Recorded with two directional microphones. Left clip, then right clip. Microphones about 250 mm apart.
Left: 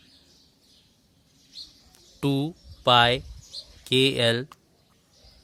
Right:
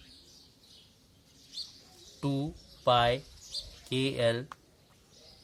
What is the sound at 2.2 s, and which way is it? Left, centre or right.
Speech, left.